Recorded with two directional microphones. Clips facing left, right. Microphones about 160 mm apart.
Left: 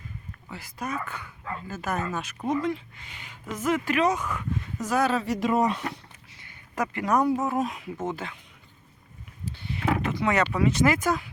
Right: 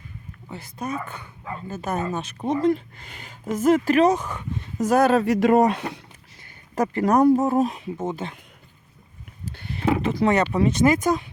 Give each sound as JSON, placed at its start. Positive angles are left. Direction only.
{"t": 0.4, "sound": "speech", "side_deg": -25}
{"t": 2.6, "sound": "speech", "side_deg": -40}
{"t": 4.9, "sound": "speech", "side_deg": -45}
{"t": 6.4, "sound": "speech", "side_deg": -35}
{"t": 9.5, "sound": "a sound", "side_deg": -45}
{"t": 10.0, "sound": "speech", "side_deg": -35}